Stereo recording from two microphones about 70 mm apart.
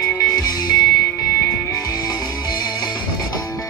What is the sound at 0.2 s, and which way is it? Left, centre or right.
Music, left.